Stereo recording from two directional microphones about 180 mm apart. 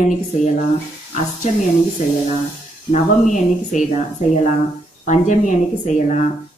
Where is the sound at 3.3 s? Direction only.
45° left (ahead or behind).